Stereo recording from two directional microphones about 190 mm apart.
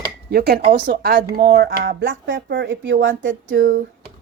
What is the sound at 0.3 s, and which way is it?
Speech, 55° right (ahead or behind).